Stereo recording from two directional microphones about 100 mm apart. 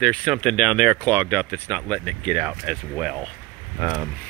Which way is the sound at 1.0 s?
15° left (ahead or behind).